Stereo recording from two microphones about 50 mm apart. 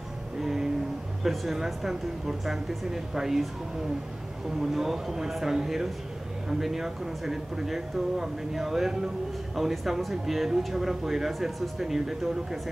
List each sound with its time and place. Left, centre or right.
0.4 s music: centre
1.2 s speech: centre
4.6 s speech: centre